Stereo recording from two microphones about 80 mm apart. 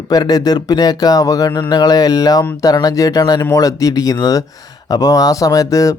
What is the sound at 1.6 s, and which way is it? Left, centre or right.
Speech, left.